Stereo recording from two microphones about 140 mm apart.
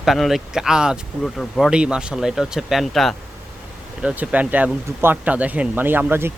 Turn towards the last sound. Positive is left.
turn(degrees=-15)  # may be behind; listen again after turning